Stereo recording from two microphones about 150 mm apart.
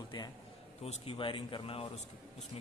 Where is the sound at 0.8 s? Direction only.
40° left (ahead or behind).